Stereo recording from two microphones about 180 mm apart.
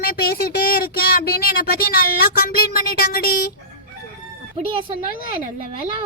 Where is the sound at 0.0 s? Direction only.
55° left (ahead or behind).